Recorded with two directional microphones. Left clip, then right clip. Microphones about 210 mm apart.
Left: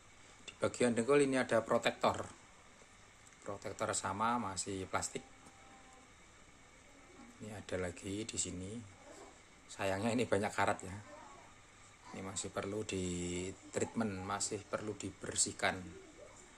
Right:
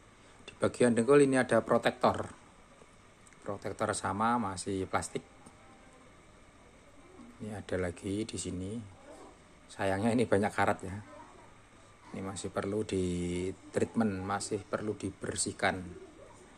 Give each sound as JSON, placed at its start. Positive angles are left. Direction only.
{"t": 0.5, "sound": "speech", "side_deg": -15}
{"t": 3.4, "sound": "speech", "side_deg": -15}
{"t": 7.4, "sound": "speech", "side_deg": -15}
{"t": 12.2, "sound": "speech", "side_deg": -15}